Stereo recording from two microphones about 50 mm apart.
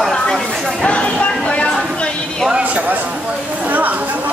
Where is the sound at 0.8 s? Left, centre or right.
Left.